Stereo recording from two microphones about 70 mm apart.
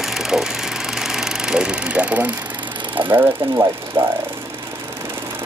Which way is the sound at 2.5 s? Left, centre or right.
Right.